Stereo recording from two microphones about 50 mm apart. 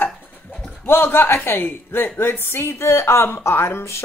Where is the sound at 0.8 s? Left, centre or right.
Left.